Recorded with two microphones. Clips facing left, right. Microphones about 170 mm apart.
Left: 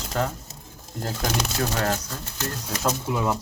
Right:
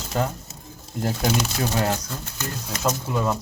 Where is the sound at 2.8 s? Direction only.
5° left (ahead or behind).